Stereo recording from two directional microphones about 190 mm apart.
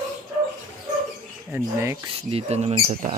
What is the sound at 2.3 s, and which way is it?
Speech, 30° right (ahead or behind).